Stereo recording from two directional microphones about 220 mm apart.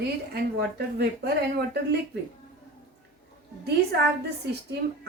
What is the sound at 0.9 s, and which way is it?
Speech, 45° right (ahead or behind).